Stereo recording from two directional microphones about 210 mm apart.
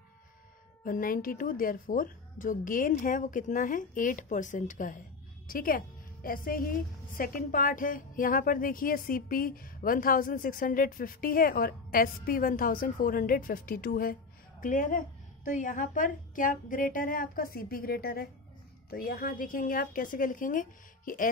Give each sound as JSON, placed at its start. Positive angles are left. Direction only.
{"t": 0.8, "sound": "a woman's voice", "side_deg": 40}